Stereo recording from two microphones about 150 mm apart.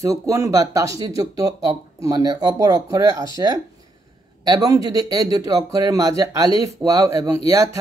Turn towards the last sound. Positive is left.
turn(degrees=-20)  # may be behind; listen again after turning